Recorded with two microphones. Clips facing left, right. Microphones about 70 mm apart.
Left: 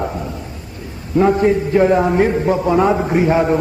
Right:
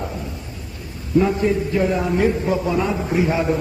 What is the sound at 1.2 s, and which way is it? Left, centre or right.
A man's voice, left.